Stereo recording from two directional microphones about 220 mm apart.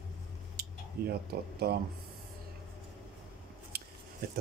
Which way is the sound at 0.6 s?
45° right (ahead or behind).